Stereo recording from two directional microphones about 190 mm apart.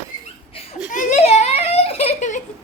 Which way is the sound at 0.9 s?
40° left (ahead or behind).